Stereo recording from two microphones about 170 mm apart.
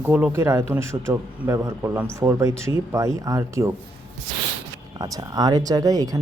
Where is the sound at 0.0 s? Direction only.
10° right (ahead or behind).